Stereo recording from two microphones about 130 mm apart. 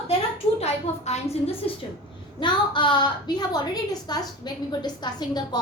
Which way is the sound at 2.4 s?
35° left (ahead or behind).